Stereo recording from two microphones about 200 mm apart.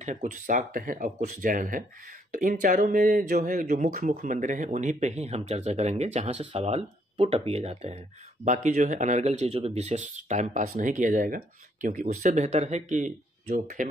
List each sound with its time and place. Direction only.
0.0 s speech: 35° right (ahead or behind)